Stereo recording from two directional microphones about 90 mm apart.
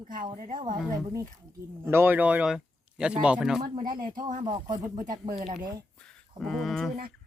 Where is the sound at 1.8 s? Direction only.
25° right (ahead or behind); by 3.6 s 10° right (ahead or behind).